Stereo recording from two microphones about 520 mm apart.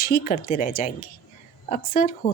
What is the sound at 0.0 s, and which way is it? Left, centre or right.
Speech, centre.